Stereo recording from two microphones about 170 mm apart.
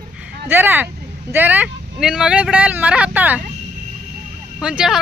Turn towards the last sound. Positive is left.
turn(degrees=-5)  # may be behind; listen again after turning